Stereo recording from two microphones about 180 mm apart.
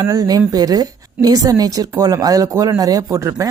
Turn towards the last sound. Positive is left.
turn(degrees=-20)  # may be behind; listen again after turning